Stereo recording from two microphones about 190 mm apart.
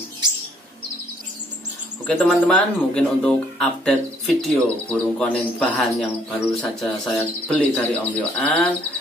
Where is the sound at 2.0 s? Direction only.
5° left (ahead or behind).